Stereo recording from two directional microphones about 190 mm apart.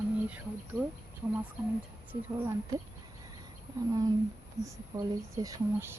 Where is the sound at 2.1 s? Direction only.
15° right (ahead or behind).